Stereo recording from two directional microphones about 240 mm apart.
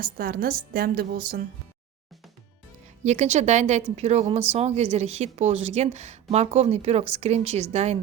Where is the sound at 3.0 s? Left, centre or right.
Right.